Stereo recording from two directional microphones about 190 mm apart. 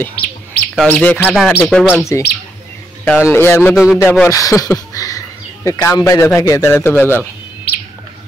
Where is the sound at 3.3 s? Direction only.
10° left (ahead or behind).